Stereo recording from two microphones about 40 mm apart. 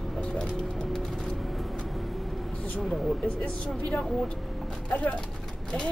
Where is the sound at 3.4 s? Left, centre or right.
Left.